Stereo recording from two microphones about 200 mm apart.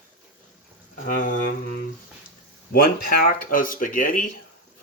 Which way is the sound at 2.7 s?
45° left (ahead or behind).